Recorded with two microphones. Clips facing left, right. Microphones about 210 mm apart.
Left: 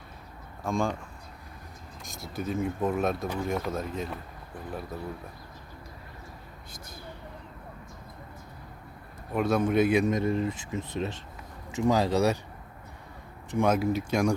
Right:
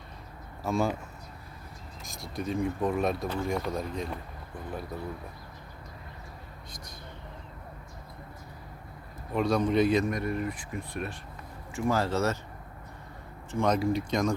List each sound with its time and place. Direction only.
0.6 s speech: 5° right (ahead or behind)
2.0 s speech: centre (ahead or behind)
9.3 s speech: 5° left (ahead or behind)
10.1 s speech: 25° left (ahead or behind)
13.5 s speech: 10° left (ahead or behind)